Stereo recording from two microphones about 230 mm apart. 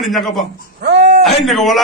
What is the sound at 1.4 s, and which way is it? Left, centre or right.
Speech, centre.